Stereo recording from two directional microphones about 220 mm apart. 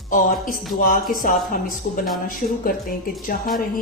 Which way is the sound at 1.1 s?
40° left (ahead or behind).